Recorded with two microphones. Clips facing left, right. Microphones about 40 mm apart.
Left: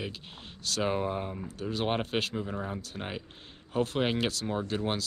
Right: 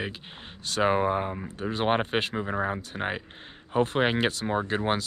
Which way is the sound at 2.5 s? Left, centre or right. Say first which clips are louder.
Right 7 dB; right.